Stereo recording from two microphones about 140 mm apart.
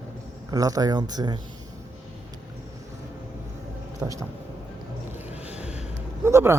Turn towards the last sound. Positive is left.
turn(degrees=-20)  # may be behind; listen again after turning